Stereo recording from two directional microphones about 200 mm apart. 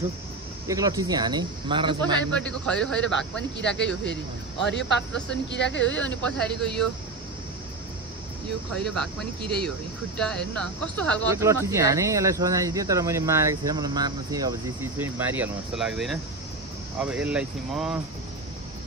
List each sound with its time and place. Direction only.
0.7 s speech: 15° right (ahead or behind)
2.3 s speech: 5° left (ahead or behind)
3.6 s speech: 60° left (ahead or behind)
5.9 s speech: 5° left (ahead or behind)
8.7 s speech: 5° left (ahead or behind)
10.1 s speech: 5° left (ahead or behind)
11.3 s speech: 15° right (ahead or behind)